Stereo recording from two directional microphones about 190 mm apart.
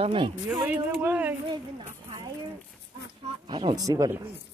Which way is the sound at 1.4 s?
25° right (ahead or behind).